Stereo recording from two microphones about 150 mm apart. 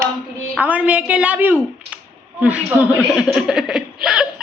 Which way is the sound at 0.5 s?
10° right (ahead or behind).